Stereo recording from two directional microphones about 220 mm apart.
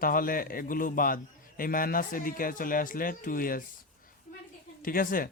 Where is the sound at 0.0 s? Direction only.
40° left (ahead or behind).